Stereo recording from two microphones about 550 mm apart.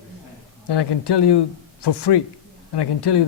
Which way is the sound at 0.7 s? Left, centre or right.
Left.